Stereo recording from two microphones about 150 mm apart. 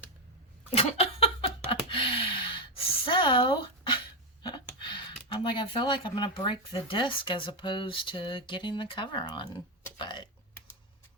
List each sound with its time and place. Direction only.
0.7 s laughter: 45° left (ahead or behind)
1.9 s a sound: 35° left (ahead or behind)
4.4 s speech: 30° left (ahead or behind)
10.0 s typing: 30° left (ahead or behind)